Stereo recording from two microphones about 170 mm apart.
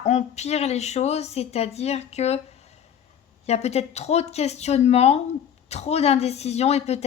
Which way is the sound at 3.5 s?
40° left (ahead or behind).